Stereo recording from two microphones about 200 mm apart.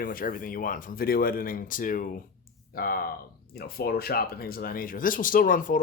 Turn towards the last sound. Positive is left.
turn(degrees=45)  # may be behind; listen again after turning